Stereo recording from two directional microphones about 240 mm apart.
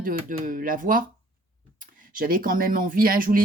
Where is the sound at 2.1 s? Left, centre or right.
Right.